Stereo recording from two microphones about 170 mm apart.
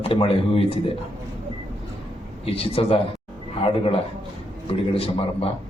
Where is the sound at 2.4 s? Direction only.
35° left (ahead or behind).